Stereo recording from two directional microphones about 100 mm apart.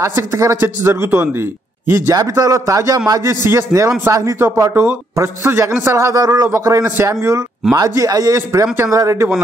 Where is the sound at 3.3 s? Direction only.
25° right (ahead or behind).